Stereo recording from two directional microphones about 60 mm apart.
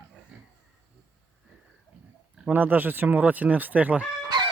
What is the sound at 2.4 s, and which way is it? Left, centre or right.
Speech, right.